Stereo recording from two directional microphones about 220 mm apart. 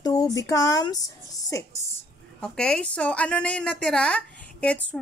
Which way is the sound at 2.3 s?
5° left (ahead or behind).